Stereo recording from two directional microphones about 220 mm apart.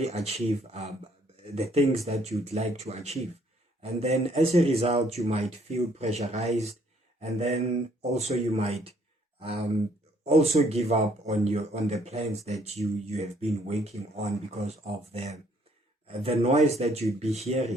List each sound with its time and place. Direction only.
0.0 s speech: 30° right (ahead or behind)